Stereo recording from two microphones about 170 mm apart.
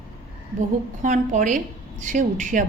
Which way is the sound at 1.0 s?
45° right (ahead or behind).